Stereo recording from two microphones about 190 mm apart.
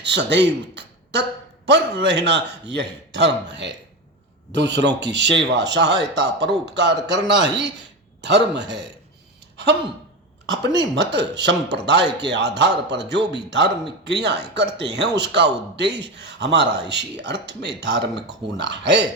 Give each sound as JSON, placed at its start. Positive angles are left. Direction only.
{"t": 0.0, "sound": "a sound", "side_deg": -65}
{"t": 1.6, "sound": "a man's voice", "side_deg": -65}
{"t": 10.5, "sound": "a man's voice", "side_deg": -65}